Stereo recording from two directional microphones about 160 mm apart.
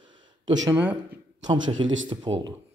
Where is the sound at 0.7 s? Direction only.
10° right (ahead or behind).